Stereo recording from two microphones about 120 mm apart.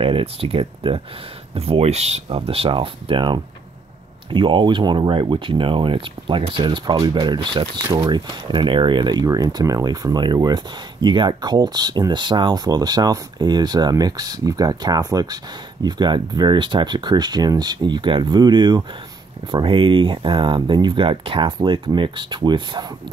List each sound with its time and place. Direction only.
0.0 s speech: 50° right (ahead or behind)